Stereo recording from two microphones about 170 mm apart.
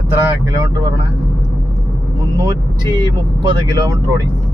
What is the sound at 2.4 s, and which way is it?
Speech, 25° right (ahead or behind).